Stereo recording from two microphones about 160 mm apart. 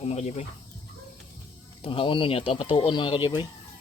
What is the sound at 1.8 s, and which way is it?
Speech, 35° left (ahead or behind).